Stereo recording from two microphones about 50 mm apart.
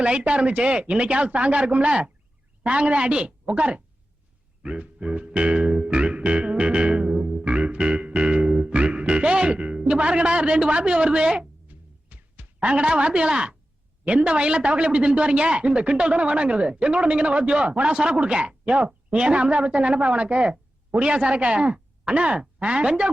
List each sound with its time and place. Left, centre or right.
0.0 s a woman's voice: right
4.6 s music: right
7.4 s music: right
11.7 s a sound: right
14.0 s a woman's voice: right